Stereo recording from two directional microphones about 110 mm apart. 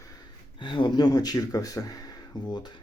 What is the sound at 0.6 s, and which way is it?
Speech, 45° left (ahead or behind).